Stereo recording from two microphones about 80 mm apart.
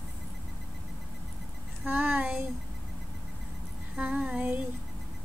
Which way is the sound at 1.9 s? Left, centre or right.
Right.